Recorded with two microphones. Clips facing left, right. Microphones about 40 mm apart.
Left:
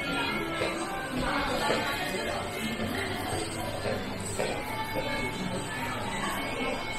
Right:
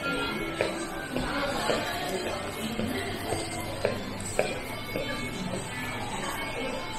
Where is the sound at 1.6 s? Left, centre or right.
Left.